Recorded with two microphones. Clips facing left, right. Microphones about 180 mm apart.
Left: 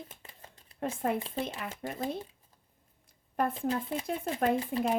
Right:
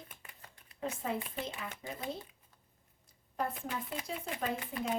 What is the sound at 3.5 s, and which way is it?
Speech, 25° left (ahead or behind).